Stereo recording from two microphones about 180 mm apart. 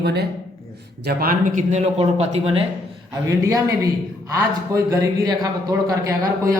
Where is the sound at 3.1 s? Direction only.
20° right (ahead or behind).